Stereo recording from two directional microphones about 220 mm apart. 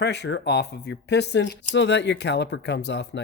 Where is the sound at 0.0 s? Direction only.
50° left (ahead or behind).